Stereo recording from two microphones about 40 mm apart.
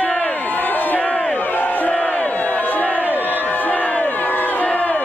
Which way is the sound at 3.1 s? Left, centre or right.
Right.